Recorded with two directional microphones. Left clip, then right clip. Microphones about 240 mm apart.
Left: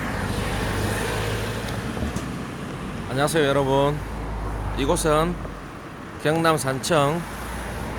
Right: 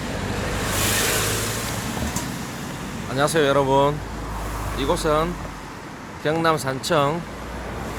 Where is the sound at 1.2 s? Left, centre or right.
Right.